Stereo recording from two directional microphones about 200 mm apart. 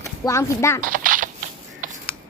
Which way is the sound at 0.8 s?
45° right (ahead or behind).